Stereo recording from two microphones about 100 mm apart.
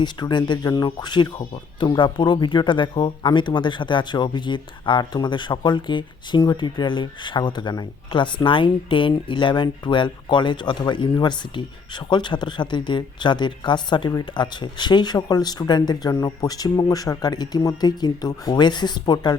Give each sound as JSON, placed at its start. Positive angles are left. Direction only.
{"t": 0.0, "sound": "speech", "side_deg": 50}
{"t": 8.4, "sound": "speech", "side_deg": 60}